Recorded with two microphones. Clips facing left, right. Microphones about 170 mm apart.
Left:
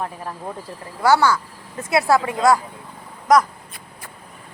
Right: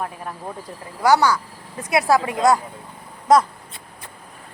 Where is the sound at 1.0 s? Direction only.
15° right (ahead or behind).